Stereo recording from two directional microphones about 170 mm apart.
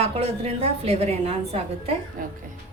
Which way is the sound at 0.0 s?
35° right (ahead or behind).